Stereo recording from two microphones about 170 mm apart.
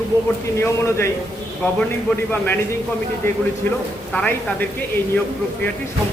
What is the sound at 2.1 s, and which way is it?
Speech, 10° left (ahead or behind).